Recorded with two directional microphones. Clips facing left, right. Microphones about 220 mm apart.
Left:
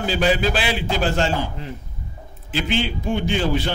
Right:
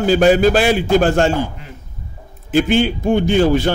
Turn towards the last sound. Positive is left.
turn(degrees=-45)  # may be behind; listen again after turning